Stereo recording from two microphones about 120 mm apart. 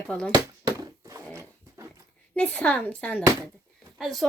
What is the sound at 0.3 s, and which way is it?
Bouncing, 35° right (ahead or behind).